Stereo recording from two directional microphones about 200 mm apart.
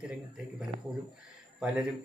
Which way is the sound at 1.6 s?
5° right (ahead or behind).